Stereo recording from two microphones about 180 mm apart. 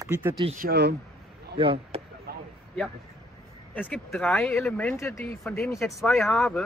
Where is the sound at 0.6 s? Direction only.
60° right (ahead or behind).